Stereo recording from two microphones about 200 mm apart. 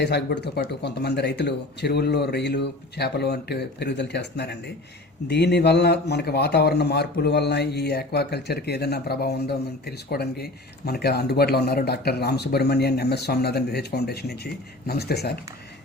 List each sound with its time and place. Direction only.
0.0 s a man's voice: 55° left (ahead or behind)